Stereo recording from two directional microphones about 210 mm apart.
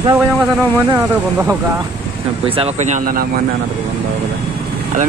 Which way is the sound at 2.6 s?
35° right (ahead or behind).